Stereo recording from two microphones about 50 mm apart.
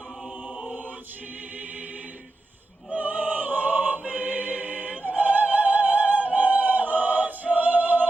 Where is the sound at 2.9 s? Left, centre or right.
Right.